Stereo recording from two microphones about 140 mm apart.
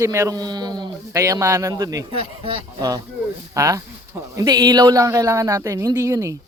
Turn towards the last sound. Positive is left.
turn(degrees=-20)  # may be behind; listen again after turning